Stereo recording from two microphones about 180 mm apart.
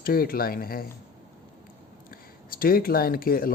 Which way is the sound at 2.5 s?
55° left (ahead or behind).